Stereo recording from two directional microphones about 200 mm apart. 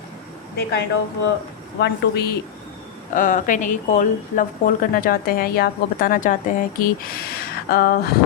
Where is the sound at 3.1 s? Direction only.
40° left (ahead or behind).